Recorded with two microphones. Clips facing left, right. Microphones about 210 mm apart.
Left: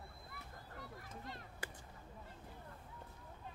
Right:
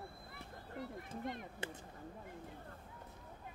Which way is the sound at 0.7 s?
25° right (ahead or behind).